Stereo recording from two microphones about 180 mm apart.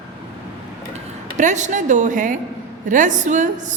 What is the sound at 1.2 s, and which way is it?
A woman's voice, 45° right (ahead or behind).